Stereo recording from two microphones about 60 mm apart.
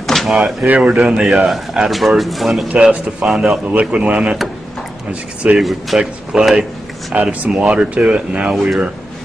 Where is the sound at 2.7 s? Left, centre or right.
Centre.